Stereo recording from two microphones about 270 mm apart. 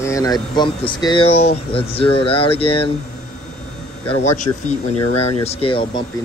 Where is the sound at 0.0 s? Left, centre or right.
Centre.